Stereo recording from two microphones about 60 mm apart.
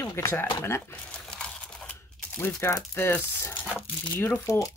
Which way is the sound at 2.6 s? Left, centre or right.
Left.